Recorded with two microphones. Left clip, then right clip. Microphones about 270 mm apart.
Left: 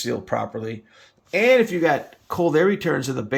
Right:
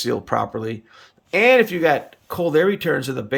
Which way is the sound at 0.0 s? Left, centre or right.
Centre.